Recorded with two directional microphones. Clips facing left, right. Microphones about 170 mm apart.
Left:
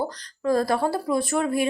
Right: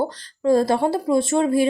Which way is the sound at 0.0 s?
25° right (ahead or behind).